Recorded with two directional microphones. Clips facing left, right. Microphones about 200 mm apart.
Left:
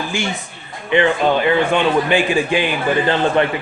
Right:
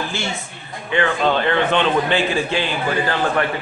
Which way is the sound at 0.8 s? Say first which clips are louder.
Left 4 dB; 20° left (ahead or behind).